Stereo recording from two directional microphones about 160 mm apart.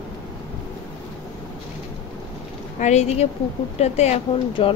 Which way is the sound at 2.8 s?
45° left (ahead or behind).